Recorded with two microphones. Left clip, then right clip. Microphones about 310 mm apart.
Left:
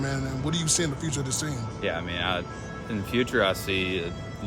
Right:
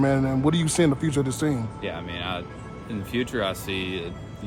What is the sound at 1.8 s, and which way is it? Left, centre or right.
Speech, centre.